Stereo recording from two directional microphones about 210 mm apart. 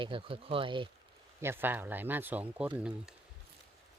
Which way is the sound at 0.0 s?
25° right (ahead or behind).